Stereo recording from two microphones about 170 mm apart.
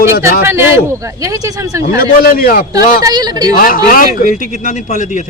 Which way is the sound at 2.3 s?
60° left (ahead or behind).